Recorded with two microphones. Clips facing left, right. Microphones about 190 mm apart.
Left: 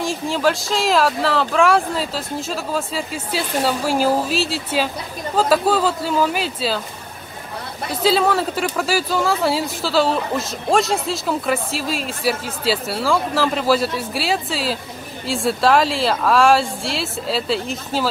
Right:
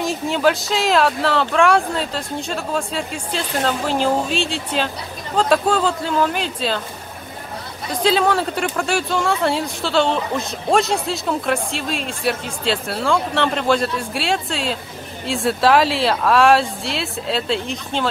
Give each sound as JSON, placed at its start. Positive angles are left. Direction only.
{"t": 0.0, "sound": "speech", "side_deg": 0}
{"t": 7.9, "sound": "speech", "side_deg": 5}